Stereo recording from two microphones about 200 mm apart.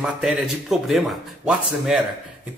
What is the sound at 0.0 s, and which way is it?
Speech, 5° right (ahead or behind).